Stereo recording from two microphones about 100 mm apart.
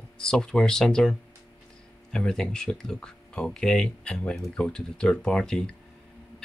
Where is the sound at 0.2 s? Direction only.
5° left (ahead or behind).